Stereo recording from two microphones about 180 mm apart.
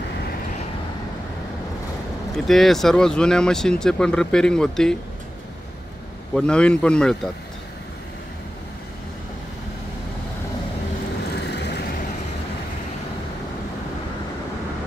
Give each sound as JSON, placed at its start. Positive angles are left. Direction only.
{"t": 2.3, "sound": "speech", "side_deg": 0}
{"t": 6.3, "sound": "speech", "side_deg": 5}
{"t": 11.3, "sound": "vehicle", "side_deg": 70}